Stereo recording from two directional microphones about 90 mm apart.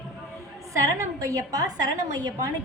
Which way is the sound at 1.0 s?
40° right (ahead or behind).